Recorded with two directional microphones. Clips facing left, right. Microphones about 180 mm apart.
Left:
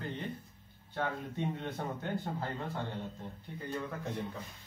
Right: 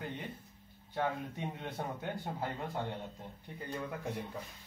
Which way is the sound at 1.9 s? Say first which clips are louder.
Left 2 dB; 15° right (ahead or behind).